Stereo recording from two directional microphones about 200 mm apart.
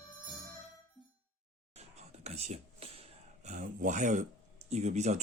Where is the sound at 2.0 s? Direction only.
30° right (ahead or behind).